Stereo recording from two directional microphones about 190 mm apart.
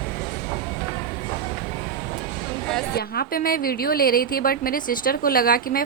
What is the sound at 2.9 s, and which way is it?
A woman's voice, 55° left (ahead or behind).